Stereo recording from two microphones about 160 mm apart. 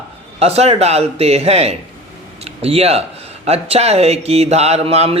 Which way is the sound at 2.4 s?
40° right (ahead or behind).